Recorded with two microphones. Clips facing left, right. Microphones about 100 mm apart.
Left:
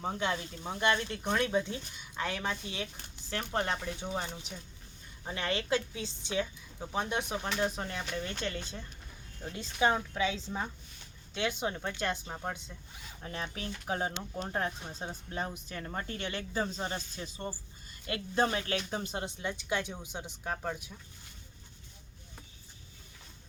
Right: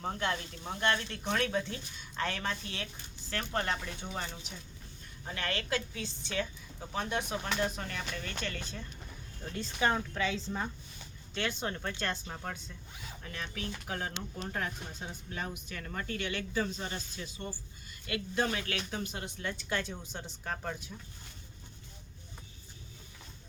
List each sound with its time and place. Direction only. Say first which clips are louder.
0.0 s speech: left 1 dB; 15° left (ahead or behind)
13.2 s speech: left 2 dB; 30° left (ahead or behind); by 20.9 s 10° left (ahead or behind)